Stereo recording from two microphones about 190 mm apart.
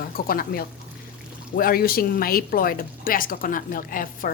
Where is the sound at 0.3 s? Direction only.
50° left (ahead or behind).